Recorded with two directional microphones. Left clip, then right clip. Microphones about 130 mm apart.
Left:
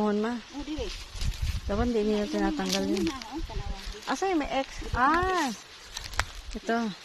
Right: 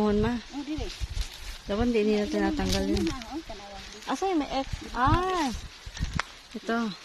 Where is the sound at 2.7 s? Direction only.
5° right (ahead or behind).